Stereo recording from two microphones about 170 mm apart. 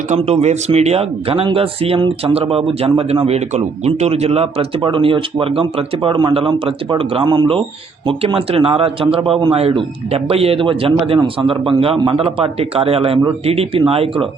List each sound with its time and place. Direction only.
0.1 s speech: 40° right (ahead or behind)